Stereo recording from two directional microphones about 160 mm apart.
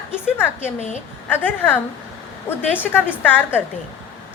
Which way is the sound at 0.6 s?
45° left (ahead or behind).